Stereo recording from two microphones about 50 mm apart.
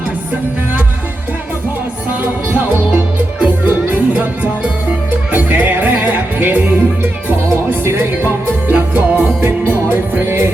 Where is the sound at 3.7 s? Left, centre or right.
Right.